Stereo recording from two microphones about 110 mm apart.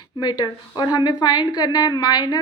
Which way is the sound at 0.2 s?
40° left (ahead or behind).